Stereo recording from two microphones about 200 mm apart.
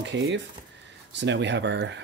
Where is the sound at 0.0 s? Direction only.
65° right (ahead or behind).